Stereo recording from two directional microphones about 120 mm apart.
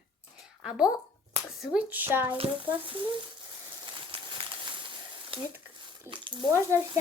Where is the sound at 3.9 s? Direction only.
40° right (ahead or behind).